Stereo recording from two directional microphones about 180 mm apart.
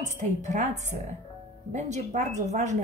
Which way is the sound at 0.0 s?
40° right (ahead or behind).